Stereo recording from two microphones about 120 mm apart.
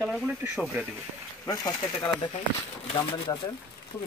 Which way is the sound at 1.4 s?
30° left (ahead or behind).